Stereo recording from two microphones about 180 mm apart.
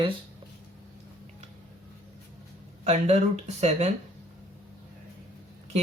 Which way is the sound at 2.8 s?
40° right (ahead or behind).